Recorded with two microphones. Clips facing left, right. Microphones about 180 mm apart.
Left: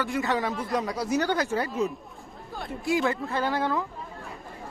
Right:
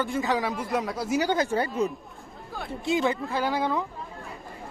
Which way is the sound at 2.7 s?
25° right (ahead or behind).